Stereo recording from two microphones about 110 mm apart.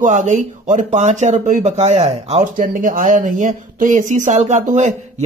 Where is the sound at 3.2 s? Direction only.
90° right.